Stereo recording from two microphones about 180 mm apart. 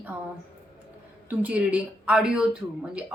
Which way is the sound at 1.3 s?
5° right (ahead or behind).